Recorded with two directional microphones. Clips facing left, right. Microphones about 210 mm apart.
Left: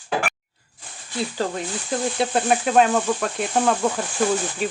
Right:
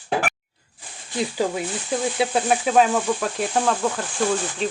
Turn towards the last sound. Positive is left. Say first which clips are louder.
# left 1 dB
turn(degrees=5)  # may be behind; listen again after turning